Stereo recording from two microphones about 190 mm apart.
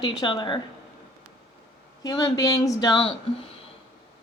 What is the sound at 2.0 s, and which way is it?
Speech, 20° left (ahead or behind).